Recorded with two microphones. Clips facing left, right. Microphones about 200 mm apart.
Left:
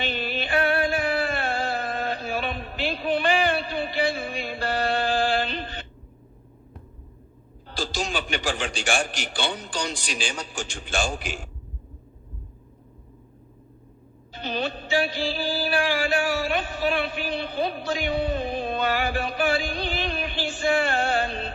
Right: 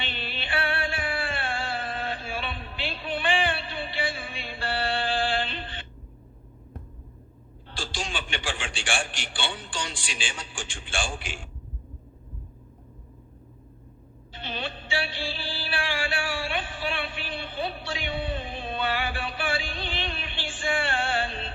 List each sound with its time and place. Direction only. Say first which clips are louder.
0.0 s music: left 8 dB; 40° left (ahead or behind)
7.7 s a man's voice: left 6 dB; 40° left (ahead or behind)
14.3 s music: left 6 dB; 40° left (ahead or behind)